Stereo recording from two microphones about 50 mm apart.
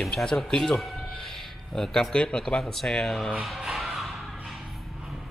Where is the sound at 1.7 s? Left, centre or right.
Centre.